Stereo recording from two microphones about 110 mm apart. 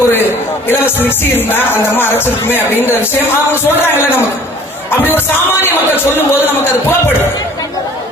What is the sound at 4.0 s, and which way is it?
Speech, 20° left (ahead or behind).